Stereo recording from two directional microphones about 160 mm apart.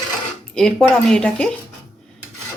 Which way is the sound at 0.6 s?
5° left (ahead or behind).